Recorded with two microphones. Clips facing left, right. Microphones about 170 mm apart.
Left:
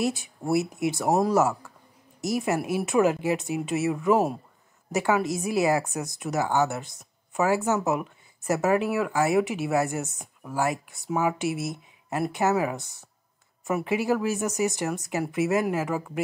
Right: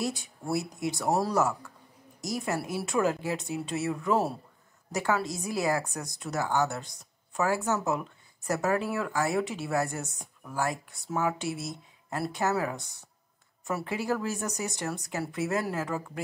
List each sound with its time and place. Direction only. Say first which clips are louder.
0.2 s a woman's voice: left 6 dB; 20° left (ahead or behind)